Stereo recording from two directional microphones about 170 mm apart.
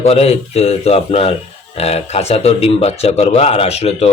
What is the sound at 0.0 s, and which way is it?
A man's voice, 35° left (ahead or behind).